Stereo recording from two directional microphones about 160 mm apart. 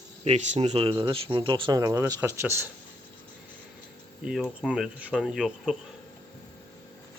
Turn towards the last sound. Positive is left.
turn(degrees=0)  # may be behind; listen again after turning